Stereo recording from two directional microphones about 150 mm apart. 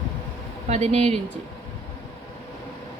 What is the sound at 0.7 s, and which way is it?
Speech, 45° right (ahead or behind).